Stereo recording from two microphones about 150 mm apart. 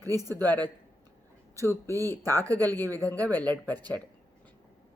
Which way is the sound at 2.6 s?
15° left (ahead or behind).